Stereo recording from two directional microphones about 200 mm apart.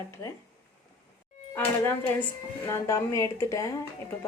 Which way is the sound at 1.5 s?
10° left (ahead or behind).